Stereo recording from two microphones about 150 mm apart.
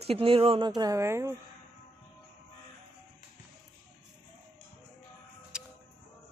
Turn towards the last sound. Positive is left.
turn(degrees=-5)  # may be behind; listen again after turning